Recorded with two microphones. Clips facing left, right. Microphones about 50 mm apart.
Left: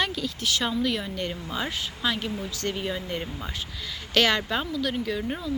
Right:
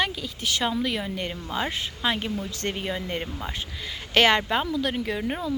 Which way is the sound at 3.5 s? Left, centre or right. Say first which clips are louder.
Right 1 dB; right.